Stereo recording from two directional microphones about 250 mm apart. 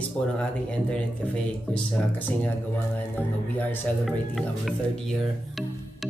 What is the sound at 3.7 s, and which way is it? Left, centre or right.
Speech, centre.